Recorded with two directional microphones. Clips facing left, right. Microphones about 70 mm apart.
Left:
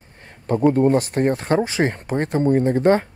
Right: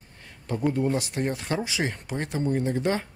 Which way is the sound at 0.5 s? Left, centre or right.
Left.